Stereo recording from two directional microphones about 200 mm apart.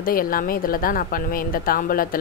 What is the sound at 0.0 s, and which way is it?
Speech, 45° left (ahead or behind).